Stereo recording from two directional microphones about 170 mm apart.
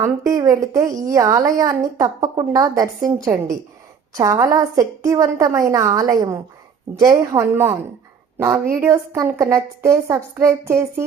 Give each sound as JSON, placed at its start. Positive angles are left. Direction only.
{"t": 0.0, "sound": "a woman's voice", "side_deg": -20}